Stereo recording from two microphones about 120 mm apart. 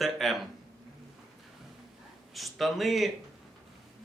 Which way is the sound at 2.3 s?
Centre (ahead or behind).